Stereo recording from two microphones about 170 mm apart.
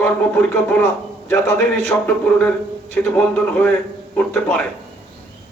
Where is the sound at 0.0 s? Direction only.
10° left (ahead or behind).